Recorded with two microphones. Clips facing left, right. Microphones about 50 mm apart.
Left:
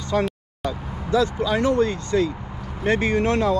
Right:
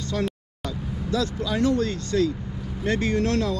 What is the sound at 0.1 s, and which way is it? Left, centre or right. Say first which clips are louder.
Speech: left 6 dB; left.